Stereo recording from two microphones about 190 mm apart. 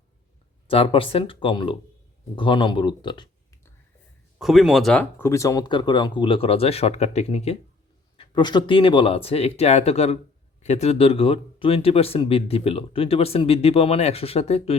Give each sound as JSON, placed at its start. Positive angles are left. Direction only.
{"t": 0.7, "sound": "speech", "side_deg": 30}
{"t": 4.4, "sound": "speech", "side_deg": 0}
{"t": 8.2, "sound": "speech", "side_deg": 25}